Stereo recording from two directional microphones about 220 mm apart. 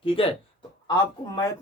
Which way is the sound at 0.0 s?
25° left (ahead or behind).